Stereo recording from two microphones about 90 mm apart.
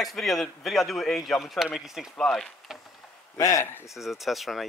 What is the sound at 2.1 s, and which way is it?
Speech, 5° left (ahead or behind).